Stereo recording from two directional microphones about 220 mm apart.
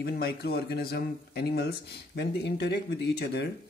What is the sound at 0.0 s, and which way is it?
Speech, 45° left (ahead or behind).